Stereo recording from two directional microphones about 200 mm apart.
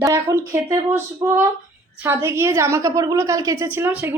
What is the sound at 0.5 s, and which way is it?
A woman's voice, 15° right (ahead or behind).